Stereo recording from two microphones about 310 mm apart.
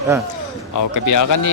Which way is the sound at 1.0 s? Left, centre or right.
Left.